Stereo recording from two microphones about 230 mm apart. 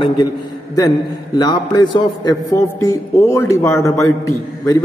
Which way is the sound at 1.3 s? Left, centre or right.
Centre.